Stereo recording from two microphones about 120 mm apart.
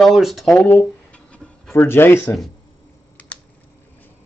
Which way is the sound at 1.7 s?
20° left (ahead or behind).